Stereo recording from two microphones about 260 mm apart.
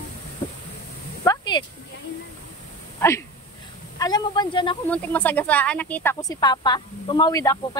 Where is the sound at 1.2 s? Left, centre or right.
Centre.